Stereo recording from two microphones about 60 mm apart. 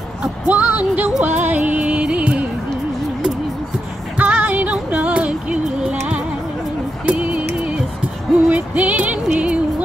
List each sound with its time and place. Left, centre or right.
0.5 s music: right
4.2 s music: right
7.1 s a sound: right
8.5 s music: right